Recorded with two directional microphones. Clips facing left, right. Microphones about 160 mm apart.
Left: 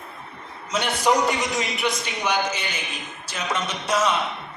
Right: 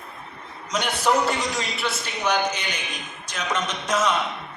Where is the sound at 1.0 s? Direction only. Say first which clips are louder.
Left 1 dB; 20° left (ahead or behind).